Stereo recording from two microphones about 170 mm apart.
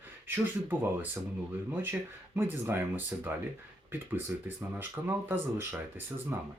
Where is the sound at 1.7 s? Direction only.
10° right (ahead or behind).